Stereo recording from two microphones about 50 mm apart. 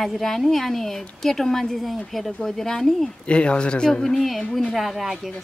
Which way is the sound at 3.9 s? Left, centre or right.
Centre.